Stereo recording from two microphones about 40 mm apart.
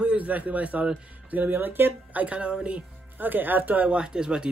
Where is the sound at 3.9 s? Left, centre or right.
Right.